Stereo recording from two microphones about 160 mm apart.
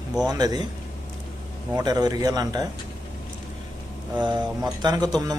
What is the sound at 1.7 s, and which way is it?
Speech, 25° right (ahead or behind).